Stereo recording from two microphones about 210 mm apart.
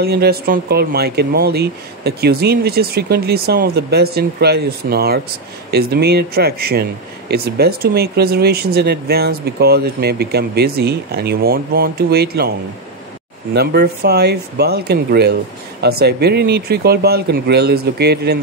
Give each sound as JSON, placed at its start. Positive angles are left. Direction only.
{"t": 0.0, "sound": "speech", "side_deg": -50}
{"t": 13.6, "sound": "speech", "side_deg": -50}